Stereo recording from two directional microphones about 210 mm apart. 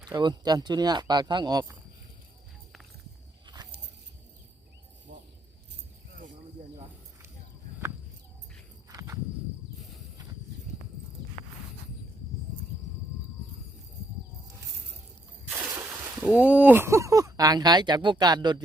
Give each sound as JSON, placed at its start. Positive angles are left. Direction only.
{"t": 0.0, "sound": "speech", "side_deg": -20}
{"t": 3.4, "sound": "biting", "side_deg": -20}
{"t": 5.1, "sound": "a sound", "side_deg": -55}
{"t": 8.9, "sound": "walk", "side_deg": -15}
{"t": 16.3, "sound": "speech", "side_deg": -5}